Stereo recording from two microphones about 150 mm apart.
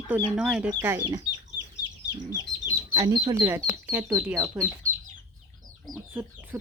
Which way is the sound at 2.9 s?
25° right (ahead or behind).